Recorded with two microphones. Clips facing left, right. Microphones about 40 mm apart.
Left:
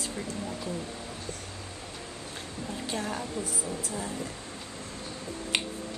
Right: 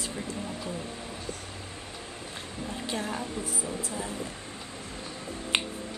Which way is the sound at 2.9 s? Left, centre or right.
Centre.